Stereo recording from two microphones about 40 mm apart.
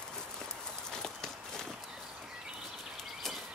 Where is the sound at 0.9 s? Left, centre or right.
Centre.